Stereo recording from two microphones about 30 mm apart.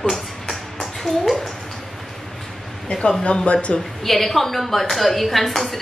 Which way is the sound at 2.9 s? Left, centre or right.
Left.